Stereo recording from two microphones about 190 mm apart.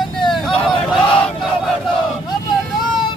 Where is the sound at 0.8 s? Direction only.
Centre (ahead or behind).